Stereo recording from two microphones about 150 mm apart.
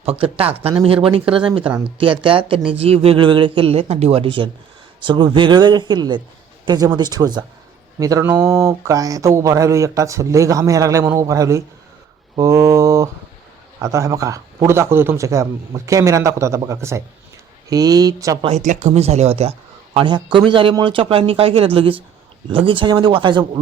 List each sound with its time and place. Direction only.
0.0 s speech: 40° right (ahead or behind); by 18.3 s 25° right (ahead or behind)
18.4 s speech: 50° right (ahead or behind); by 23.4 s 30° right (ahead or behind)